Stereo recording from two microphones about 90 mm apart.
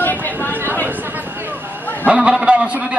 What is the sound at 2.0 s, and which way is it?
Speech, 15° right (ahead or behind).